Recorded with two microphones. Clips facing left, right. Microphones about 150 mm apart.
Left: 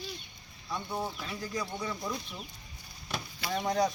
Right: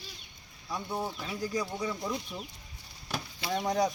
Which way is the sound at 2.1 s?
20° right (ahead or behind).